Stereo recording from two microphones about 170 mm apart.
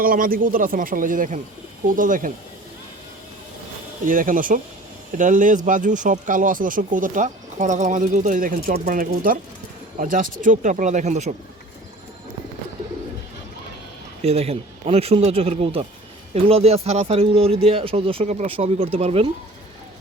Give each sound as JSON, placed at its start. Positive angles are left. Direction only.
{"t": 0.0, "sound": "speech", "side_deg": -55}
{"t": 4.0, "sound": "speech", "side_deg": -50}
{"t": 8.7, "sound": "speech", "side_deg": -40}
{"t": 9.0, "sound": "speech", "side_deg": -55}
{"t": 14.2, "sound": "speech", "side_deg": -35}